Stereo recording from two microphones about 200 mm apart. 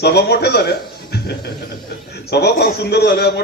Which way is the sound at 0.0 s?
55° left (ahead or behind).